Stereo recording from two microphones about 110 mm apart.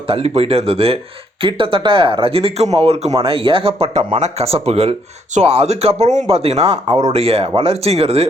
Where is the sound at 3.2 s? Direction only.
55° right (ahead or behind).